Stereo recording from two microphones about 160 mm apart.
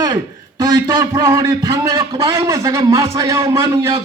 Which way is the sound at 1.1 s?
20° right (ahead or behind).